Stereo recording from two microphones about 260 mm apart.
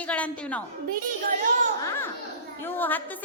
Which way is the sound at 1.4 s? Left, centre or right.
Right.